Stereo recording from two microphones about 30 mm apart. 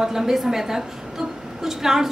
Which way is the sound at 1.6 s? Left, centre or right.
Centre.